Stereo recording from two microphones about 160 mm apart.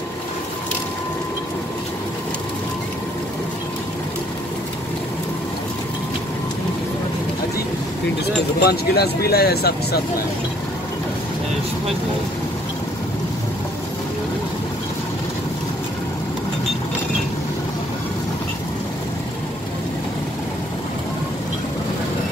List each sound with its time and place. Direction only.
8.5 s speech: 85° left